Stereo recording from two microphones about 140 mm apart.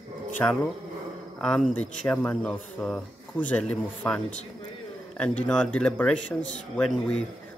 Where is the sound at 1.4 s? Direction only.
Centre (ahead or behind).